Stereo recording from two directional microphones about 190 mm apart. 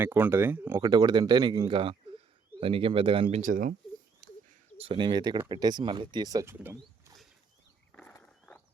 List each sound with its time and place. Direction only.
0.0 s speech: 10° right (ahead or behind)
0.8 s speech: 20° right (ahead or behind)
3.4 s speech: 45° right (ahead or behind)
4.2 s a sound: 45° right (ahead or behind)
4.8 s speech: 25° right (ahead or behind)
8.2 s a sound: 5° left (ahead or behind)